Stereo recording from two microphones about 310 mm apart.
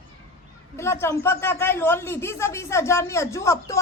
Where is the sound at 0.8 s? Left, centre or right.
Centre.